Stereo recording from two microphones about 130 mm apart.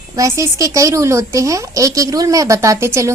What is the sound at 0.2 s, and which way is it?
Speech, 25° right (ahead or behind).